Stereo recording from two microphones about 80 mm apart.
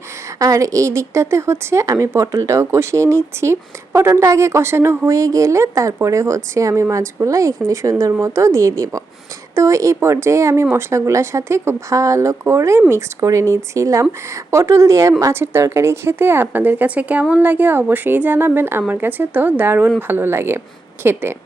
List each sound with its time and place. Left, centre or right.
0.3 s a woman's voice: right